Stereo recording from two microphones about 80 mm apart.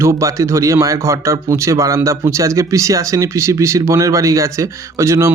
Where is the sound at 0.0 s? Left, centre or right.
Right.